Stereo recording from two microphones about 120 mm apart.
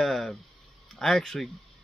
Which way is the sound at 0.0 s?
Centre (ahead or behind).